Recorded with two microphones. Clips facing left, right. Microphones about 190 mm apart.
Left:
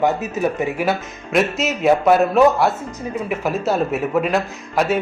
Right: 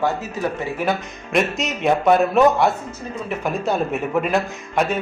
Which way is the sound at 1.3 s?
Centre (ahead or behind).